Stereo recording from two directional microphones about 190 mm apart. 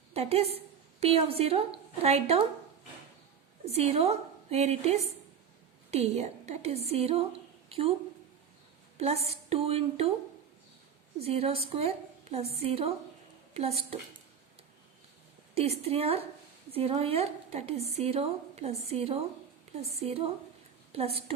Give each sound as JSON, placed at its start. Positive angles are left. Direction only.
{"t": 0.1, "sound": "a woman's voice", "side_deg": -30}
{"t": 3.7, "sound": "a woman's voice", "side_deg": -35}
{"t": 9.0, "sound": "a woman's voice", "side_deg": -35}
{"t": 11.2, "sound": "a woman's voice", "side_deg": -30}
{"t": 15.5, "sound": "a woman's voice", "side_deg": -30}
{"t": 19.7, "sound": "a sound", "side_deg": -35}
{"t": 20.1, "sound": "a woman's voice", "side_deg": -30}